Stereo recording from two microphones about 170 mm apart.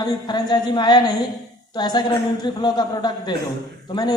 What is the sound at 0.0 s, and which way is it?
A man's voice, 25° left (ahead or behind).